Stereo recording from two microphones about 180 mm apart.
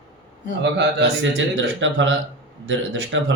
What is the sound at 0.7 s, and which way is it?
Speech, 90° right.